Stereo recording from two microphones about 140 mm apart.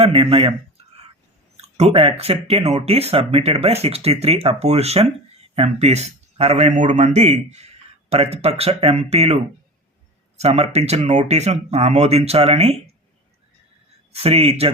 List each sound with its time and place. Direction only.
0.0 s speech: 45° right (ahead or behind)
1.6 s speech: 50° right (ahead or behind)
14.1 s speech: 45° right (ahead or behind)